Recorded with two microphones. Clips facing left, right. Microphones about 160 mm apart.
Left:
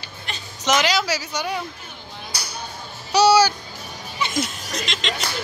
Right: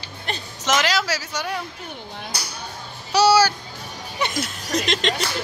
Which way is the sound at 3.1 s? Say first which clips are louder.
Left 1 dB; 5° right (ahead or behind).